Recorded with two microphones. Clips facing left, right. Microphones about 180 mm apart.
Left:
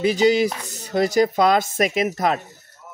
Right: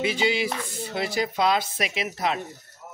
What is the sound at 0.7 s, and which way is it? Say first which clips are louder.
Speech: left 8 dB; 40° left (ahead or behind).